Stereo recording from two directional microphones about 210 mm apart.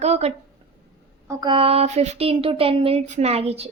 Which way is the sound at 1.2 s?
20° right (ahead or behind).